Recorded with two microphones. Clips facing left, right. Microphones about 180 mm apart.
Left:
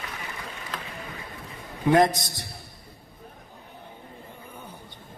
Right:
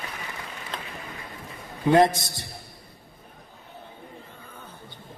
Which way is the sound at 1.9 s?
25° right (ahead or behind).